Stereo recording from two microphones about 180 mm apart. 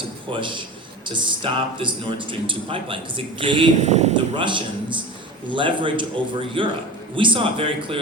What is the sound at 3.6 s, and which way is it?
Speech, 40° right (ahead or behind).